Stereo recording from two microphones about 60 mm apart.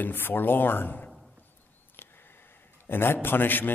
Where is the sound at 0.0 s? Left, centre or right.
Left.